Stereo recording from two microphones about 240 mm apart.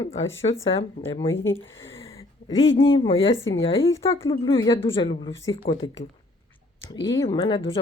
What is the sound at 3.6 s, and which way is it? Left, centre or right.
A woman's voice, left.